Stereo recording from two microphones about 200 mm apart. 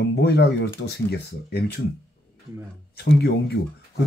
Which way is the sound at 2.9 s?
55° left (ahead or behind).